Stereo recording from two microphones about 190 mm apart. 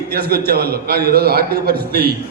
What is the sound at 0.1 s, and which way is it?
A man's voice, 55° right (ahead or behind).